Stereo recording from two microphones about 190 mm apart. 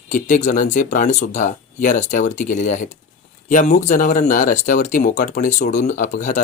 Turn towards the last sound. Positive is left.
turn(degrees=40)  # may be behind; listen again after turning